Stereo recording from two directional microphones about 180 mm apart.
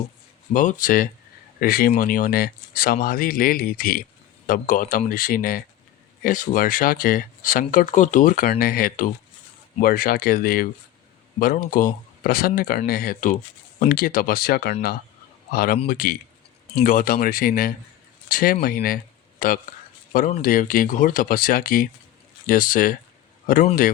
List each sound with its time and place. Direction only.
0.5 s speech: 45° left (ahead or behind)